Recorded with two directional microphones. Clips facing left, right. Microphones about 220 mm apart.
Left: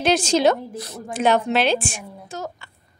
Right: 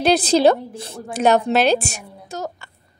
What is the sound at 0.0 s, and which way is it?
A woman's voice, 35° right (ahead or behind).